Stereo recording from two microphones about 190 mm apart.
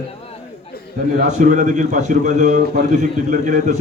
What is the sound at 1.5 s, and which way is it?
A man's voice, 40° right (ahead or behind).